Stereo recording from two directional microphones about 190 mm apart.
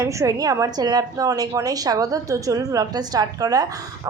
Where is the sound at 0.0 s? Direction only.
15° right (ahead or behind).